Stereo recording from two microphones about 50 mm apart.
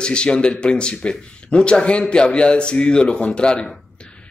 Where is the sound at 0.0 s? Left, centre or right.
Centre.